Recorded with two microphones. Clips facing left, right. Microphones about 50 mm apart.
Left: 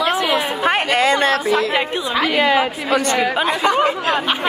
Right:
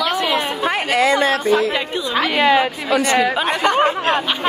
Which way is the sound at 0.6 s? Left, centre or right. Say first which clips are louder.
Left 1 dB; left.